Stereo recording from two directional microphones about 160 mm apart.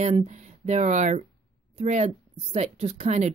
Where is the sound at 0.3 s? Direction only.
45° right (ahead or behind).